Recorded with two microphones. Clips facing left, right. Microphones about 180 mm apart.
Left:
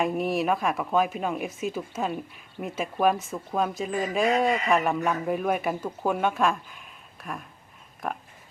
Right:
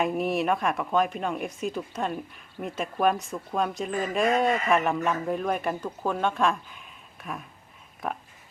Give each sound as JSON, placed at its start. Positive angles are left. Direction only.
{"t": 0.0, "sound": "speech", "side_deg": 0}